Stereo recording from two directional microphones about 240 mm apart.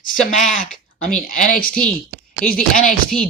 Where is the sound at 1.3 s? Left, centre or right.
Left.